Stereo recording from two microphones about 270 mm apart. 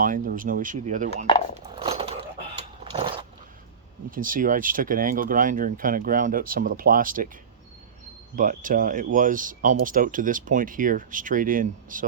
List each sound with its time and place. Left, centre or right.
0.0 s speech: right
1.5 s a sound: right
4.1 s speech: right
8.4 s speech: right